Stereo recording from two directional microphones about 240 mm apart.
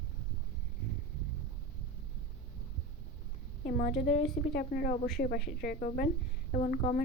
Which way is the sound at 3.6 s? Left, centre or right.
Left.